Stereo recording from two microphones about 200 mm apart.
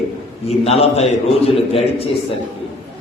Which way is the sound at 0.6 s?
30° left (ahead or behind).